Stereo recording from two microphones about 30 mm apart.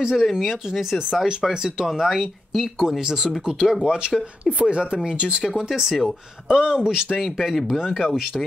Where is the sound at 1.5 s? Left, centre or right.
Centre.